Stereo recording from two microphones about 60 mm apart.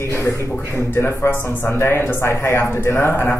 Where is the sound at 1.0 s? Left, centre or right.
Left.